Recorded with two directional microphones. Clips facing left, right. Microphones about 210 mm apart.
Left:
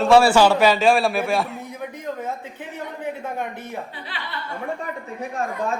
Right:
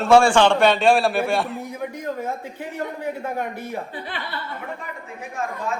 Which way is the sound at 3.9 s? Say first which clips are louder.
Right 5 dB; 50° right (ahead or behind).